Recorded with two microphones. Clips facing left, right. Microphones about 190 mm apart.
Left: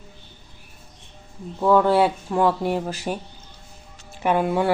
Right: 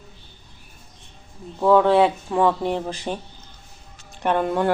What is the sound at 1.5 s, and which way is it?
Speech, centre (ahead or behind).